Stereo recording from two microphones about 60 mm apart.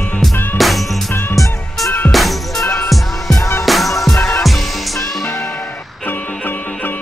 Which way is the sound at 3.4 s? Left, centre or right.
Left.